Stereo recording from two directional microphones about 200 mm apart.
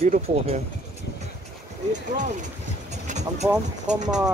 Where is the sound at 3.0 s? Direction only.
35° right (ahead or behind).